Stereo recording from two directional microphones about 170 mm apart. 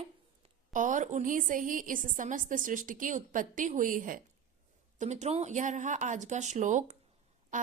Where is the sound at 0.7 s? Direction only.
50° right (ahead or behind).